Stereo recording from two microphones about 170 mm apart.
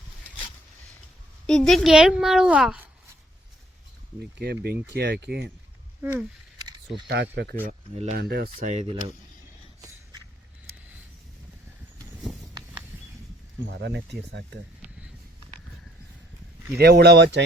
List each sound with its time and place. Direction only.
1.5 s a child's voice: centre (ahead or behind)
4.6 s speech: 70° right (ahead or behind)
6.0 s speech: 15° right (ahead or behind)
6.7 s a sound: 25° right (ahead or behind)
7.1 s speech: 75° right (ahead or behind)
7.7 s speech: 35° right (ahead or behind)
8.1 s speech: 65° right (ahead or behind)
8.6 s speech: 40° right (ahead or behind)
13.7 s speech: 85° right
16.7 s speech: 70° right (ahead or behind)